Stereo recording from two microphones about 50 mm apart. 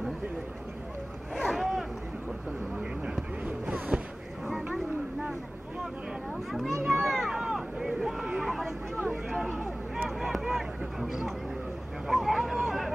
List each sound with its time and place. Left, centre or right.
1.3 s boat: centre
3.4 s a sound: right
6.5 s children playing: centre
6.9 s run: centre
7.3 s boat: centre
8.5 s a sound: centre